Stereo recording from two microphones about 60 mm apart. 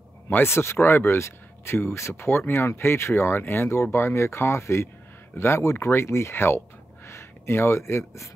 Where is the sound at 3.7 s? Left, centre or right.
Left.